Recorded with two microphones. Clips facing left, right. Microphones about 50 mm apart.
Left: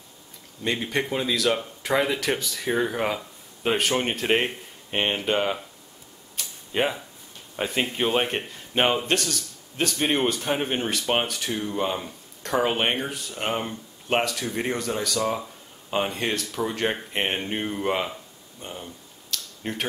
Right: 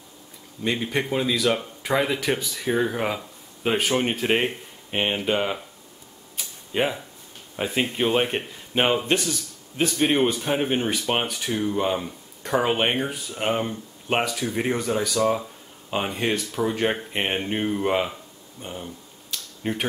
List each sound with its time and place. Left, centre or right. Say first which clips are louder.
0.7 s speech: right 1 dB; centre
6.4 s tick-tock: even; centre
6.7 s speech: right 1 dB; centre
9.0 s a man's voice: right 2 dB; centre
19.3 s a sound: right 3 dB; centre